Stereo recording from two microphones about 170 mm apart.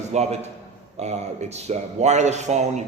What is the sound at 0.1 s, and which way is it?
A man's voice, 40° right (ahead or behind).